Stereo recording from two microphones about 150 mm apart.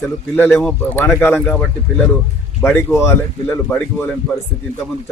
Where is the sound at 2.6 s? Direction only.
15° left (ahead or behind).